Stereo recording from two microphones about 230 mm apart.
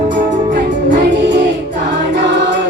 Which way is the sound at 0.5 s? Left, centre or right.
Right.